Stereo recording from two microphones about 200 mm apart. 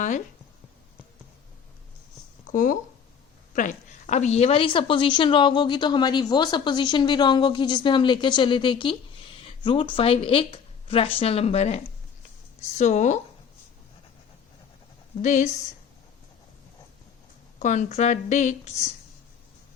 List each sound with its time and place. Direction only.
2.5 s a woman's voice: 40° left (ahead or behind)
15.2 s a woman's voice: 35° left (ahead or behind)
17.6 s a woman's voice: 35° left (ahead or behind)